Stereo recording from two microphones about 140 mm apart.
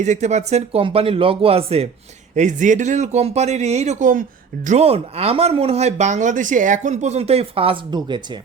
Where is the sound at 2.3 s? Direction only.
60° right (ahead or behind).